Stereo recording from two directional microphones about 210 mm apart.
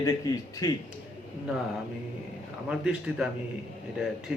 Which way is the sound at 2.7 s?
5° right (ahead or behind).